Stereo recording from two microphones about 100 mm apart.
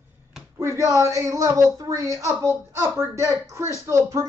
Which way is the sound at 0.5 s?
30° right (ahead or behind).